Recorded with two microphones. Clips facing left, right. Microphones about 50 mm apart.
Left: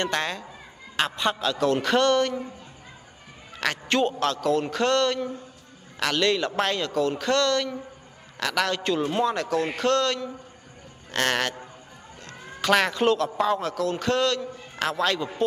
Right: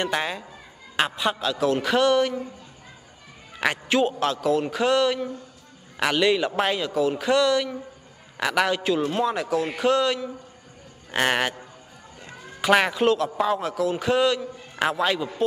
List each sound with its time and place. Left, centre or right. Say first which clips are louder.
0.0 s a man's voice: right 1 dB; centre
3.5 s a man's voice: right 2 dB; centre